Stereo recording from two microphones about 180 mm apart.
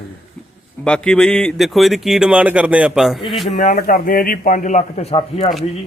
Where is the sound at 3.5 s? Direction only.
45° left (ahead or behind).